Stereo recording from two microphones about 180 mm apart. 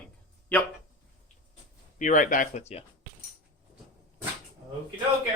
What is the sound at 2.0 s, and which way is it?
Speech, 45° left (ahead or behind).